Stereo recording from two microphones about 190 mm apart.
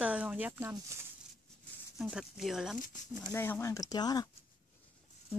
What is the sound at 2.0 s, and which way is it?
Speech, 5° right (ahead or behind).